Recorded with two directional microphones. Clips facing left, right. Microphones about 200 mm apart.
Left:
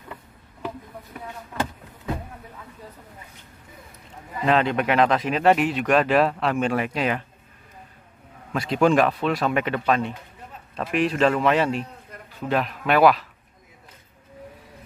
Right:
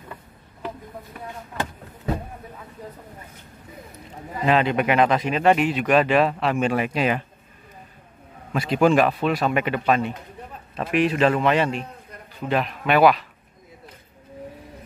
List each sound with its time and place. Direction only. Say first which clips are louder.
4.5 s speech: right 1 dB; 5° right (ahead or behind)
8.5 s speech: right 1 dB; 5° right (ahead or behind)